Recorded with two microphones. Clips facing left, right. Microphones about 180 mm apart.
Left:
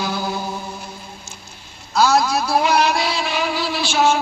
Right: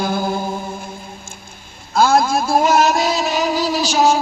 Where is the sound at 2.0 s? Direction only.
50° right (ahead or behind).